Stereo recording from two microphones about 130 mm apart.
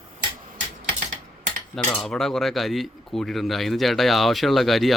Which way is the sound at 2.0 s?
5° left (ahead or behind).